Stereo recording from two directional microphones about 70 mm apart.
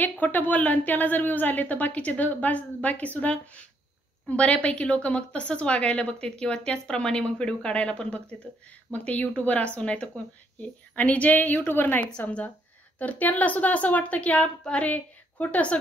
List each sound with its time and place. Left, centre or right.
0.0 s a woman's voice: left